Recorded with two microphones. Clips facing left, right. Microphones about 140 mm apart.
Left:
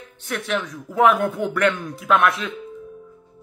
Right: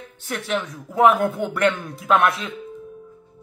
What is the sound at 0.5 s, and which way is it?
A man's voice, 30° right (ahead or behind).